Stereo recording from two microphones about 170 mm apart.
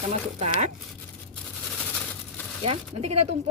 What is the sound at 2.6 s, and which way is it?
Speech, 40° right (ahead or behind).